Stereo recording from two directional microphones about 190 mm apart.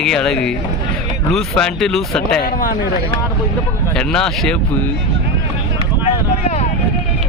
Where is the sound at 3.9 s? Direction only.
5° left (ahead or behind).